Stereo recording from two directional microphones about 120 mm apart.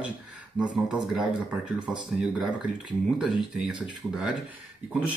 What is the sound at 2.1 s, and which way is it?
Speech, centre (ahead or behind).